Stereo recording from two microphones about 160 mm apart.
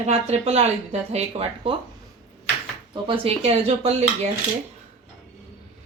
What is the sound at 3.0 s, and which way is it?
Speech, 35° right (ahead or behind).